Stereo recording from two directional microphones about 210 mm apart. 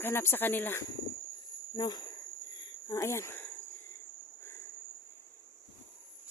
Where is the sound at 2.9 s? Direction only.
15° left (ahead or behind).